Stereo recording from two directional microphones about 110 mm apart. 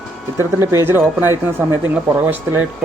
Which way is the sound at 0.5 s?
25° right (ahead or behind).